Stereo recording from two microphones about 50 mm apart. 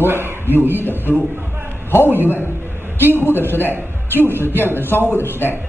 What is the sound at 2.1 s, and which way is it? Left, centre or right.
Speech, right.